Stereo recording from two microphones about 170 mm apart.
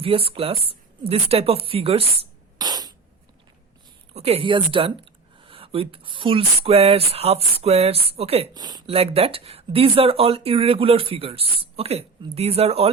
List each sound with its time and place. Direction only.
0.0 s speech: 35° right (ahead or behind)
2.6 s a sound: 25° right (ahead or behind)
4.1 s speech: 35° right (ahead or behind)
8.5 s speech: 25° right (ahead or behind)